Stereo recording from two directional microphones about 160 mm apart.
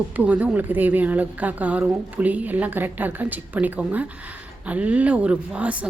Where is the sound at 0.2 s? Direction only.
10° right (ahead or behind).